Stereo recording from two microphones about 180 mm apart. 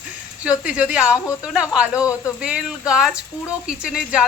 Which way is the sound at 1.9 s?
15° left (ahead or behind).